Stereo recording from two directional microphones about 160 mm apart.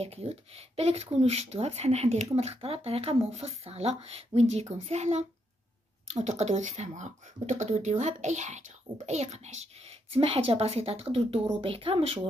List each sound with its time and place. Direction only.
0.0 s speech: 40° right (ahead or behind)
6.2 s speech: 45° right (ahead or behind)